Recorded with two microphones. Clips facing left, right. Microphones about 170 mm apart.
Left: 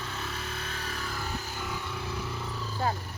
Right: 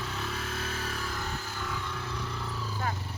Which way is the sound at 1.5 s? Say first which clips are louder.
Even; 15° left (ahead or behind).